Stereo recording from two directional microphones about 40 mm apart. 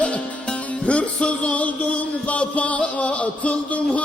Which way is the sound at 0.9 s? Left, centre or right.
Left.